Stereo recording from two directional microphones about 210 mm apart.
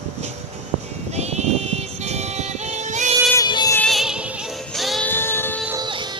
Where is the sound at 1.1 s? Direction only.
30° right (ahead or behind).